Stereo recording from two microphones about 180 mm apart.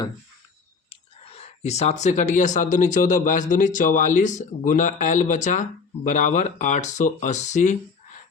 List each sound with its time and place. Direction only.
0.9 s speech: 30° left (ahead or behind)